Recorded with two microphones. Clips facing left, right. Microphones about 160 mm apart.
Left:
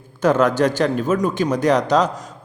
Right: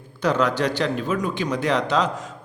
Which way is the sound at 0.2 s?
50° left (ahead or behind).